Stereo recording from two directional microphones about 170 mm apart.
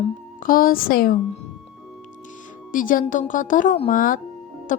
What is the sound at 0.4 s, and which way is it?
Speech, 55° left (ahead or behind).